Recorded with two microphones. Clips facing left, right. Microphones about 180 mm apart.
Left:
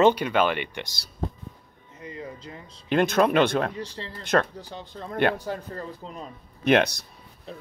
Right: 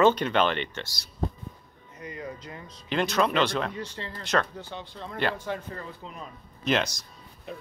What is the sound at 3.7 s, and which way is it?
Speech, 35° left (ahead or behind).